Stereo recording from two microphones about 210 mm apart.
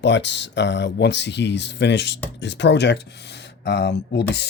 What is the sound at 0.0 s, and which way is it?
Speech, 60° left (ahead or behind).